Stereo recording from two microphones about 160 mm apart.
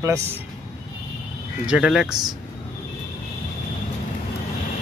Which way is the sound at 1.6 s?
5° right (ahead or behind).